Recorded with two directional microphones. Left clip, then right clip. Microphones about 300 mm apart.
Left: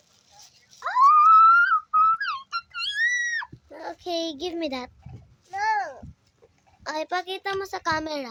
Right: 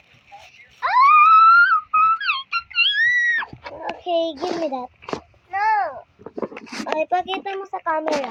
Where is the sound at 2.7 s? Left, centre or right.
Left.